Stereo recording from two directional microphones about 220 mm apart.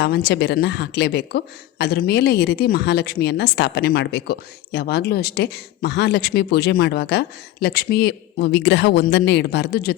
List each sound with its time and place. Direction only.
0.0 s a woman's voice: 50° left (ahead or behind)